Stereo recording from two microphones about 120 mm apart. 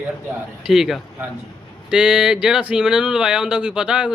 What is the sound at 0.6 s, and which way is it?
A man's voice, 5° right (ahead or behind).